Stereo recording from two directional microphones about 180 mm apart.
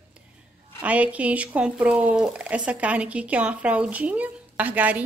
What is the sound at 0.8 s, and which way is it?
Speech, 10° right (ahead or behind).